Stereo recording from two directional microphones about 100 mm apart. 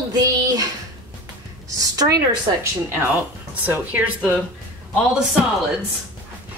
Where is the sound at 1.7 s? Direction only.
35° right (ahead or behind).